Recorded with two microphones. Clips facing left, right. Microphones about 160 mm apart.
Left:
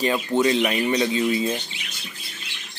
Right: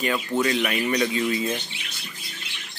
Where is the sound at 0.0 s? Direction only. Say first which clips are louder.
Left 3 dB; 25° left (ahead or behind).